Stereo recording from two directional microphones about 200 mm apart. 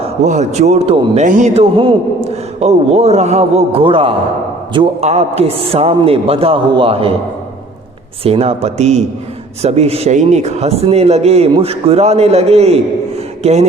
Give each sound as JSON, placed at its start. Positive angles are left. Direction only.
{"t": 0.0, "sound": "a man's voice", "side_deg": -35}
{"t": 8.2, "sound": "a man's voice", "side_deg": -30}